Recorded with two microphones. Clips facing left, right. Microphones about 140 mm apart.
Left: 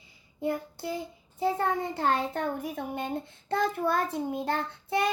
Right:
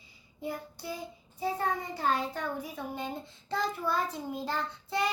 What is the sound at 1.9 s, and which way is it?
A child's voice, 55° left (ahead or behind).